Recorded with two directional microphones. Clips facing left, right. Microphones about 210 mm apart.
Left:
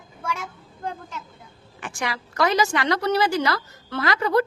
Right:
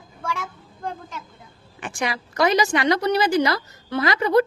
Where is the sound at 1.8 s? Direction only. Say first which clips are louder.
Right 3 dB; 20° right (ahead or behind).